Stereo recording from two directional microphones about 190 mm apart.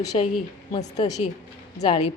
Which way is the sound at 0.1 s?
35° left (ahead or behind).